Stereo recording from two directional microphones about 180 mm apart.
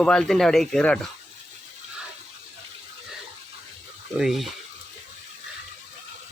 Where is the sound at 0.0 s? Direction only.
5° left (ahead or behind).